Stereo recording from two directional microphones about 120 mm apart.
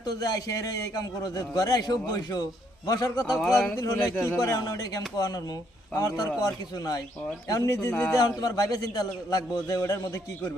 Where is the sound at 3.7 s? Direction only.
30° left (ahead or behind).